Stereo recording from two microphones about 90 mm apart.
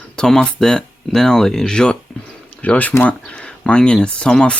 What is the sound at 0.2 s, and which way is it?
Speech, 10° left (ahead or behind).